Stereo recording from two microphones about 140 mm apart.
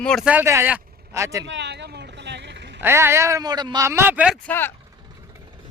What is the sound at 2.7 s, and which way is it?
Speech, 15° right (ahead or behind).